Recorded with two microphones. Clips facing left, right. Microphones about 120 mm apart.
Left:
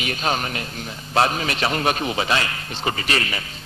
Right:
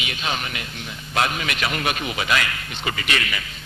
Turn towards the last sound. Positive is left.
turn(degrees=35)  # may be behind; listen again after turning